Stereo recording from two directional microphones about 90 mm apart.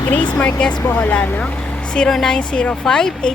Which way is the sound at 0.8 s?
20° left (ahead or behind).